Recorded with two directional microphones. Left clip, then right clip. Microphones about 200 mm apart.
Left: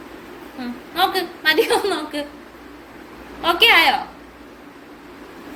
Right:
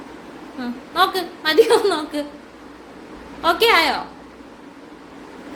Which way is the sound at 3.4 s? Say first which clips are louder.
Left 2 dB; 30° right (ahead or behind).